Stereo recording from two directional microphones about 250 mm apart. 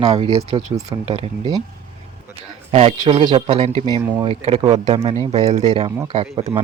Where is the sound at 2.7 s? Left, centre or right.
Right.